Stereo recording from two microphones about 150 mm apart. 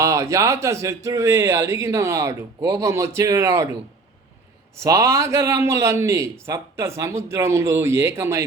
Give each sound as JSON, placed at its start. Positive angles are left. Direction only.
{"t": 0.0, "sound": "a man's voice", "side_deg": -20}
{"t": 4.8, "sound": "a man's voice", "side_deg": -20}